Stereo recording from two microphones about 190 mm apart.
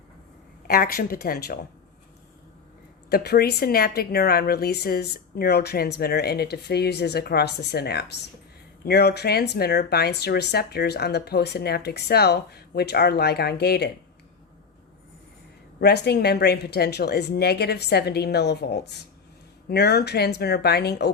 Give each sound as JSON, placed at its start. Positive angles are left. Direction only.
{"t": 0.7, "sound": "speech", "side_deg": 50}
{"t": 3.1, "sound": "speech", "side_deg": 55}
{"t": 15.8, "sound": "speech", "side_deg": 60}